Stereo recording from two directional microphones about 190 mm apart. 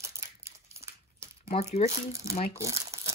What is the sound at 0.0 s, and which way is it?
Crumpling, 15° right (ahead or behind).